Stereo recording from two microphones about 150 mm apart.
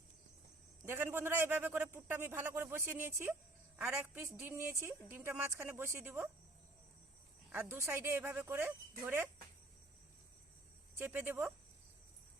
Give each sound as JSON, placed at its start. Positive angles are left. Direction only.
{"t": 0.9, "sound": "a man's voice", "side_deg": -15}
{"t": 7.5, "sound": "a man's voice", "side_deg": -15}
{"t": 10.9, "sound": "a man's voice", "side_deg": -10}